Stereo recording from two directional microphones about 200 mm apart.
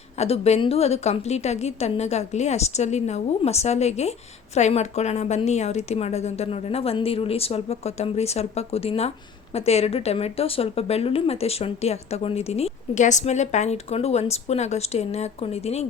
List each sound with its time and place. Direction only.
0.2 s a woman's voice: 30° left (ahead or behind)